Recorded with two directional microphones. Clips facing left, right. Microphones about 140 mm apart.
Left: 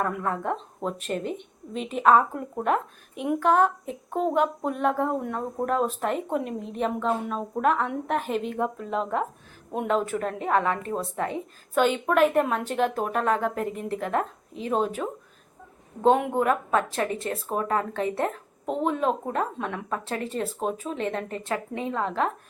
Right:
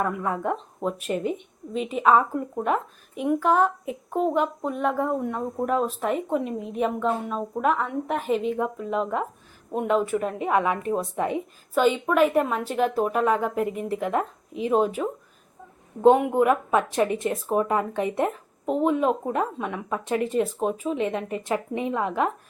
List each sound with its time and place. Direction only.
0.0 s a woman's voice: 5° right (ahead or behind)
11.7 s a woman's voice: centre (ahead or behind)
16.0 s speech: 10° right (ahead or behind)